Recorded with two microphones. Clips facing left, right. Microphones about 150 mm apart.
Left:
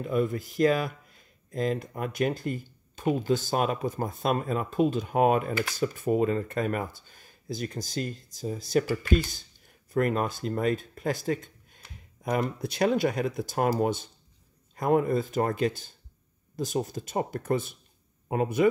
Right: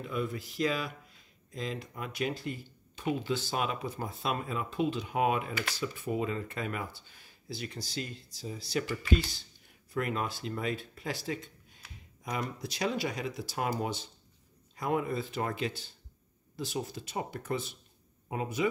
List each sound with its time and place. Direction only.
0.0 s speech: 45° left (ahead or behind)